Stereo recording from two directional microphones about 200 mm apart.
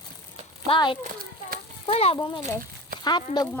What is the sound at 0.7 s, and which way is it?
Speech, 25° left (ahead or behind).